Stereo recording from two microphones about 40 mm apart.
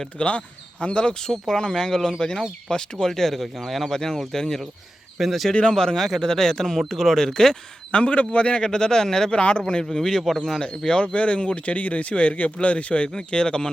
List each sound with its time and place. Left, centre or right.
0.2 s speech: left
1.3 s speech: centre
5.1 s speech: centre
5.7 s speech: centre
6.0 s speech: centre
6.2 s speech: centre
7.9 s a man's voice: left; by 9.3 s centre
9.3 s a man's voice: left
9.9 s speech: centre
10.6 s a man's voice: left